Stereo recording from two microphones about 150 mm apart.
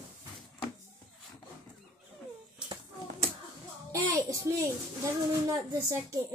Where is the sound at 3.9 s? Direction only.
20° right (ahead or behind).